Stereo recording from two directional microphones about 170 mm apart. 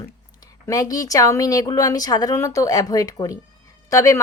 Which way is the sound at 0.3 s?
20° left (ahead or behind).